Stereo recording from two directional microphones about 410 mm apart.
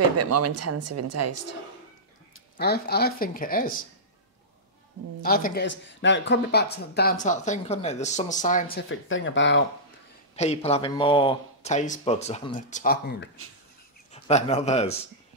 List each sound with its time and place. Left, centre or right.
0.2 s speech: right
2.5 s speech: left
5.2 s speech: left
10.3 s speech: centre